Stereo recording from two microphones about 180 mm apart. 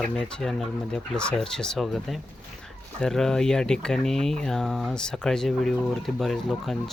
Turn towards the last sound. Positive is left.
turn(degrees=0)  # may be behind; listen again after turning